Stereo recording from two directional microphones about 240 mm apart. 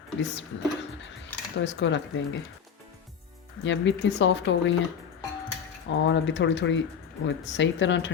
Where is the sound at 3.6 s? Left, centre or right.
Left.